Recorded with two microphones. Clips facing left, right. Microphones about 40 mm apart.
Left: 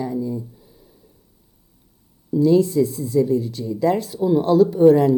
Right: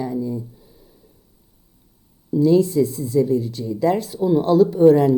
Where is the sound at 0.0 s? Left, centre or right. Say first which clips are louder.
Even; centre.